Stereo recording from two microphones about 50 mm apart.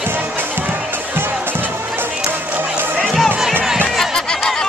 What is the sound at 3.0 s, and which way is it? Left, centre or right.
Music, centre.